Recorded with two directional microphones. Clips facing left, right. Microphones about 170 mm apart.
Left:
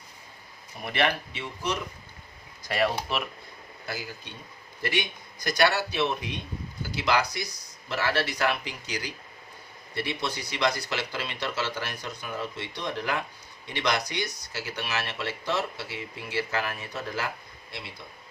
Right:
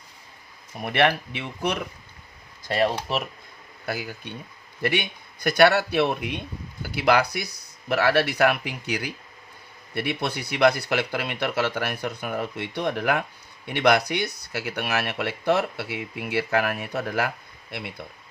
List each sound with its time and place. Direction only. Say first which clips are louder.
0.8 s speech: right 5 dB; 55° right (ahead or behind)
2.6 s speech: right 3 dB; 30° right (ahead or behind)
3.8 s speech: right 6 dB; 60° right (ahead or behind)